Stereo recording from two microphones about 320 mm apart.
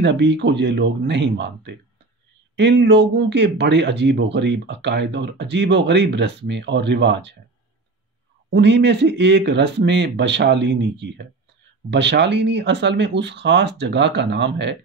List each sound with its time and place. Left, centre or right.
0.0 s speech: right
8.5 s speech: right